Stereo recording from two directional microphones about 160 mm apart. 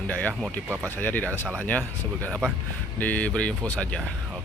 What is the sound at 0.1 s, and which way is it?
Speech, 10° left (ahead or behind).